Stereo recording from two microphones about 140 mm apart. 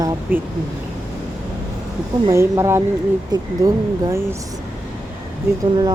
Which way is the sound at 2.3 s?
20° right (ahead or behind).